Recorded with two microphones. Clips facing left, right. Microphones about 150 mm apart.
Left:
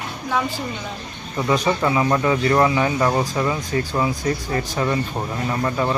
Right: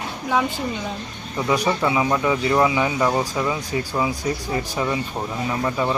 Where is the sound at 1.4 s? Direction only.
10° right (ahead or behind).